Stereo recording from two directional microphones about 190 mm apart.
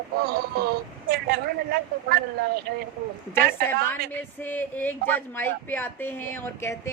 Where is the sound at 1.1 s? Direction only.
55° right (ahead or behind).